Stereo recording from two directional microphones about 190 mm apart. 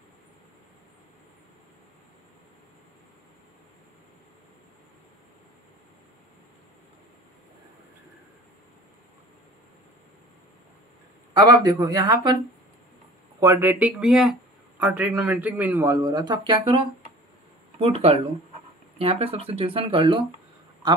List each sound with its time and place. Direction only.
11.3 s speech: 20° right (ahead or behind)
13.4 s a man's voice: 15° right (ahead or behind)